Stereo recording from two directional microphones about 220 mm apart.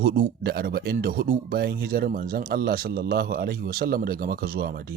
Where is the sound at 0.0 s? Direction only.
40° right (ahead or behind).